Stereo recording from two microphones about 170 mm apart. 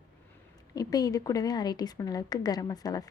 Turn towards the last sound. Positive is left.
turn(degrees=20)  # may be behind; listen again after turning